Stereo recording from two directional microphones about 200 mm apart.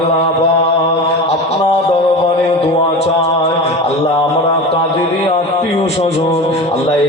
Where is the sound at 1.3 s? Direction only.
30° left (ahead or behind).